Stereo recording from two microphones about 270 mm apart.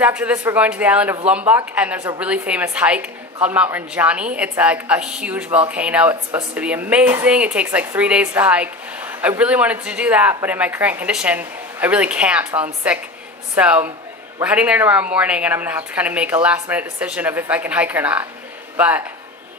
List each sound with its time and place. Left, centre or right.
0.0 s speech: centre